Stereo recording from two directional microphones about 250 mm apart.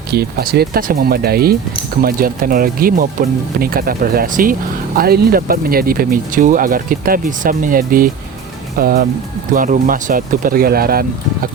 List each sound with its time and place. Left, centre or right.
0.1 s speech: right